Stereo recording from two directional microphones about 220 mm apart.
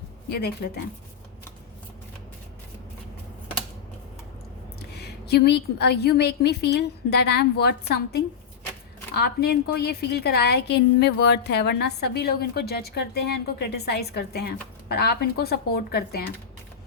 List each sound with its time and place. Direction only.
0.3 s a woman's voice: 50° left (ahead or behind)
4.9 s a woman's voice: 50° left (ahead or behind)